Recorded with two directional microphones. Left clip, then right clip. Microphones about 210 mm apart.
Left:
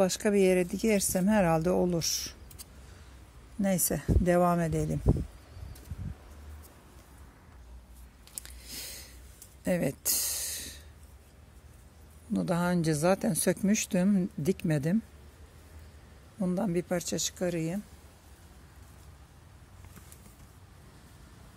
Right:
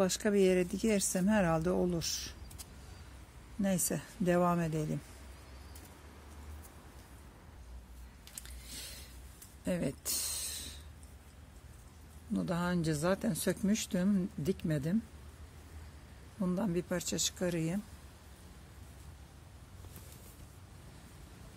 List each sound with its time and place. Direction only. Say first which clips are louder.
0.0 s speech: left 4 dB; 20° left (ahead or behind)
3.6 s speech: left 5 dB; 25° left (ahead or behind)
8.4 s a sound: left 5 dB; 25° left (ahead or behind)
12.3 s speech: left 6 dB; 30° left (ahead or behind)
16.3 s speech: left 4 dB; 20° left (ahead or behind)